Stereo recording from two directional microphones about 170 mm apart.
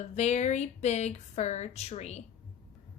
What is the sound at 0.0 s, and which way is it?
Speech, 40° left (ahead or behind).